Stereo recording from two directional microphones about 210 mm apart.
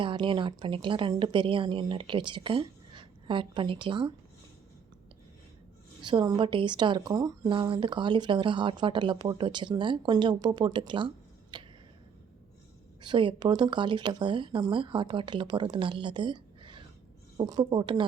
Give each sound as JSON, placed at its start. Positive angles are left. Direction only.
{"t": 0.0, "sound": "a woman's voice", "side_deg": -25}
{"t": 6.0, "sound": "a woman's voice", "side_deg": -20}
{"t": 11.5, "sound": "finger snapping", "side_deg": -20}
{"t": 13.0, "sound": "a woman's voice", "side_deg": -20}